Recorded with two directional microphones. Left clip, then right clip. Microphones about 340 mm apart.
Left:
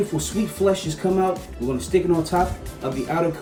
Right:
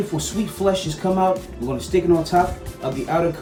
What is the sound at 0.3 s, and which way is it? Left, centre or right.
Speech, centre.